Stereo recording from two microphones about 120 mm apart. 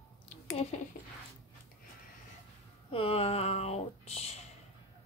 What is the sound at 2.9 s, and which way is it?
Speech, 50° left (ahead or behind).